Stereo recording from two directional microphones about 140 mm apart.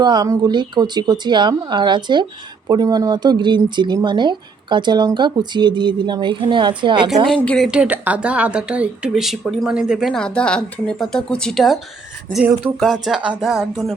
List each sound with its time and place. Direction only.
0.0 s speech: 30° right (ahead or behind)
7.4 s speech: 5° left (ahead or behind)
7.7 s speech: 10° right (ahead or behind)
12.8 s speech: centre (ahead or behind)